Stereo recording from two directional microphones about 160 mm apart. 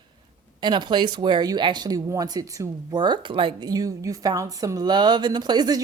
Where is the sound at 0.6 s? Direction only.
30° right (ahead or behind).